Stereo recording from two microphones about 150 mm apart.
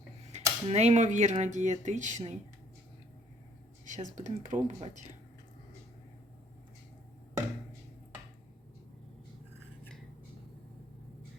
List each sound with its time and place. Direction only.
0.3 s speech: 45° right (ahead or behind)
3.8 s speech: 55° right (ahead or behind)